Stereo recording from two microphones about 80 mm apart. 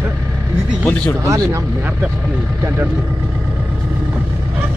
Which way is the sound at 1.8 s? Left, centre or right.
Right.